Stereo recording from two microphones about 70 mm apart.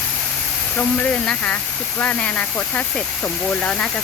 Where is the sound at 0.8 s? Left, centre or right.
Centre.